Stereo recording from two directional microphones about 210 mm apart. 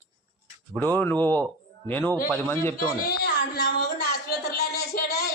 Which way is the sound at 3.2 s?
50° left (ahead or behind).